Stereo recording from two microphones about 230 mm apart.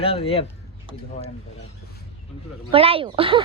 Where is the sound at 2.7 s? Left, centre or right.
Right.